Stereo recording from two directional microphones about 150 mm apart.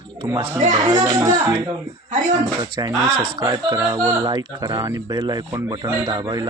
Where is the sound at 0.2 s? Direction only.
30° right (ahead or behind).